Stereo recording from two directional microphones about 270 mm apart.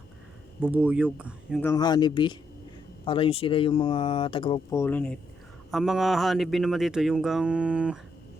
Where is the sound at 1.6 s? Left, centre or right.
Centre.